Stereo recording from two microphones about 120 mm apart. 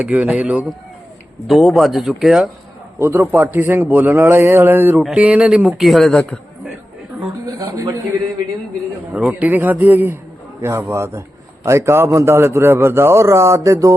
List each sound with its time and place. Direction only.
0.0 s a man's voice: 10° right (ahead or behind)
1.5 s a man's voice: centre (ahead or behind)
3.0 s a man's voice: 15° right (ahead or behind); by 6.4 s 5° left (ahead or behind)
7.4 s a sound: 30° right (ahead or behind)
9.1 s a man's voice: 10° right (ahead or behind); by 13.9 s 25° right (ahead or behind)